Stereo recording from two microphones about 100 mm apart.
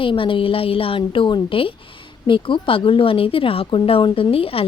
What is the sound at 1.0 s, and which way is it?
A woman's voice, 50° left (ahead or behind).